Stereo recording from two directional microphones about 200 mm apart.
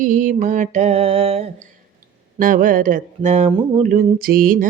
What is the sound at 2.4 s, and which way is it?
Mantra, 40° right (ahead or behind).